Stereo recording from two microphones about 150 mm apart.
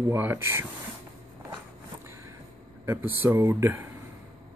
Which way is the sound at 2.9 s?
15° right (ahead or behind).